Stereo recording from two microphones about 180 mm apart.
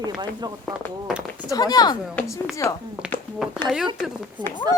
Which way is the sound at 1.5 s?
20° left (ahead or behind).